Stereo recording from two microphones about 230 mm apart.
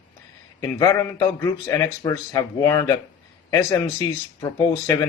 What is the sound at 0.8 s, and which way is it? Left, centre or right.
Speech, centre.